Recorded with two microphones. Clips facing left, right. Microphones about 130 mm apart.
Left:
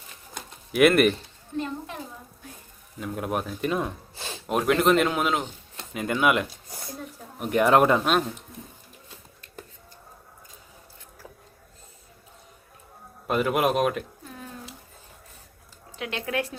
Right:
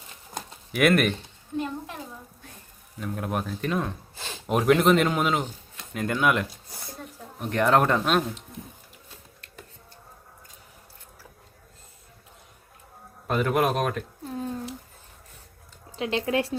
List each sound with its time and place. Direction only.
0.7 s speech: centre (ahead or behind)
1.5 s a sound: 5° right (ahead or behind)
3.0 s speech: 5° left (ahead or behind)
4.4 s speech: centre (ahead or behind)
13.2 s speech: 5° left (ahead or behind)
14.3 s a sound: 30° right (ahead or behind)
16.0 s speech: 30° right (ahead or behind)